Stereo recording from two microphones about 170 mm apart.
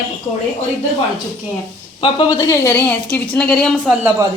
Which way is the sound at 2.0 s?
30° left (ahead or behind).